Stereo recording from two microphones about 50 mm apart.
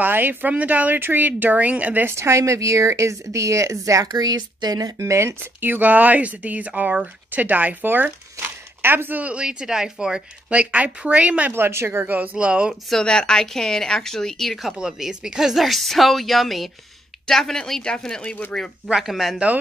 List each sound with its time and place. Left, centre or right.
0.0 s speech: right
2.0 s speech: right
5.4 s speech: right
9.2 s speech: right
10.5 s speech: right
11.5 s speech: right
12.1 s speech: right
12.9 s a woman's voice: centre
14.7 s a woman's voice: centre
18.9 s speech: centre